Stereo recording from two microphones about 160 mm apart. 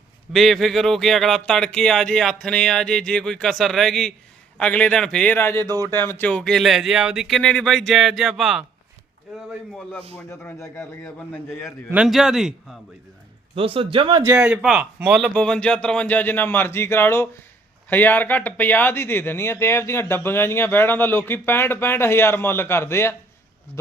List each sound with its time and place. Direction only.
0.3 s speech: centre (ahead or behind)
10.2 s speech: 15° left (ahead or behind)
11.9 s speech: 5° right (ahead or behind)
13.6 s speech: 35° right (ahead or behind)
14.3 s a man's voice: 5° right (ahead or behind)
15.4 s speech: 5° left (ahead or behind)